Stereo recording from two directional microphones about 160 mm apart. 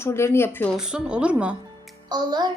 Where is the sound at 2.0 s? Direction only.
25° right (ahead or behind).